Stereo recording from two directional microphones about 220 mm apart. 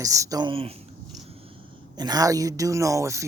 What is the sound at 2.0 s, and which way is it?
Speech, 15° right (ahead or behind).